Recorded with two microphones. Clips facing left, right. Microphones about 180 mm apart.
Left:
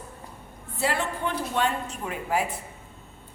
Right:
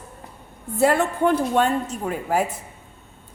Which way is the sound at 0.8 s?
50° right (ahead or behind).